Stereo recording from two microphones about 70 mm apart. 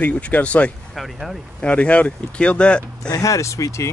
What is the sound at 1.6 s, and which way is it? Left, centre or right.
Speech, centre.